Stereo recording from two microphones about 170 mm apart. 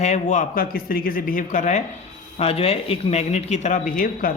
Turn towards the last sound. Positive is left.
turn(degrees=55)  # may be behind; listen again after turning